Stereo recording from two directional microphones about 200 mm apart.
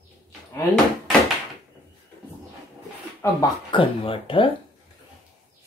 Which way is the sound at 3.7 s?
25° left (ahead or behind).